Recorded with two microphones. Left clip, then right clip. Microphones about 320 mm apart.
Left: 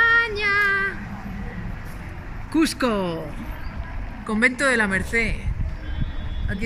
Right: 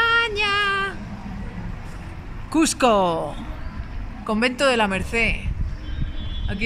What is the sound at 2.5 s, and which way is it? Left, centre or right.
Speech, centre.